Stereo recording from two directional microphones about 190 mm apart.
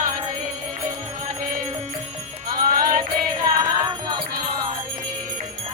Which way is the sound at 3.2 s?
20° right (ahead or behind).